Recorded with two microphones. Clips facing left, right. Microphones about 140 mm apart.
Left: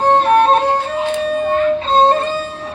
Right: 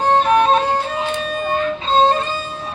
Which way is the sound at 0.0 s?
60° left (ahead or behind).